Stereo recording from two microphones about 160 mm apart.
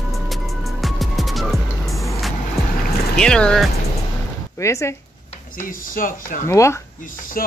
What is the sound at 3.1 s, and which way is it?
Speech, 5° left (ahead or behind).